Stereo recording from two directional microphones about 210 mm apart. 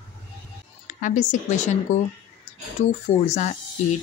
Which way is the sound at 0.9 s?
40° left (ahead or behind).